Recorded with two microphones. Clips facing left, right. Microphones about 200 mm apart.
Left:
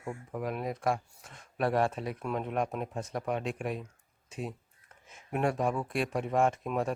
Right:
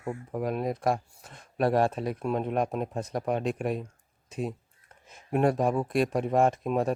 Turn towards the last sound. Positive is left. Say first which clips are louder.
# right 4 dB
turn(degrees=-35)  # may be behind; listen again after turning